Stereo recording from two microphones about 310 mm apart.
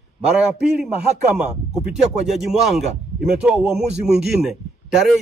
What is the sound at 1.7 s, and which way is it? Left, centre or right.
A man's voice, centre.